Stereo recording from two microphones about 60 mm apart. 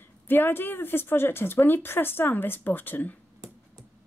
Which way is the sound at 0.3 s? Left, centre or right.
Left.